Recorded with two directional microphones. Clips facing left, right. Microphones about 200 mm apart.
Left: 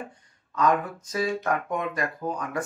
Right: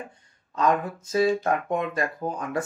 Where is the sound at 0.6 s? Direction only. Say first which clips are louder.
Even; 25° right (ahead or behind).